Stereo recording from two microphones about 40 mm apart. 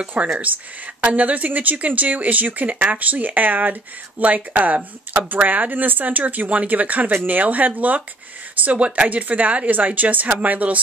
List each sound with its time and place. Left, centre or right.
0.2 s a woman's voice: right
8.6 s a woman's voice: right